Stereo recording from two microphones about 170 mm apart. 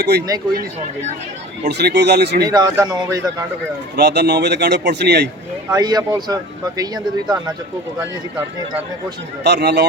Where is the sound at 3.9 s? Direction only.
85° right.